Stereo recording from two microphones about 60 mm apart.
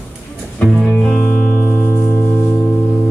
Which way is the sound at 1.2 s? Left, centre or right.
Centre.